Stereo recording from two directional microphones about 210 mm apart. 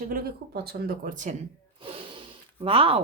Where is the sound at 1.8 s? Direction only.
25° right (ahead or behind).